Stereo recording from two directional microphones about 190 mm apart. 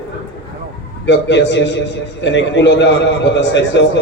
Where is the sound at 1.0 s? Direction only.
70° left (ahead or behind).